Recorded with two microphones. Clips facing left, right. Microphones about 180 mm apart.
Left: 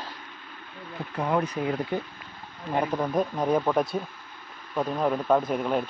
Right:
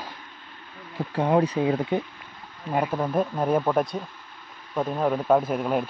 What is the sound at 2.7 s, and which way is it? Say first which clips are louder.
Speech: right 1 dB; 5° right (ahead or behind).